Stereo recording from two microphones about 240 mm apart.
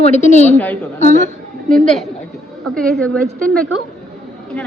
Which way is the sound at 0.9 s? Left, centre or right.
Left.